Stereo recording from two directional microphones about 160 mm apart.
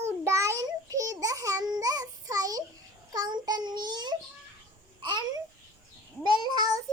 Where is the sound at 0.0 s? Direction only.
15° right (ahead or behind).